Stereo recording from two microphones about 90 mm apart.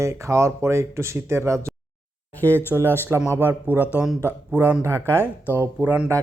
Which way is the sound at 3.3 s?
20° right (ahead or behind).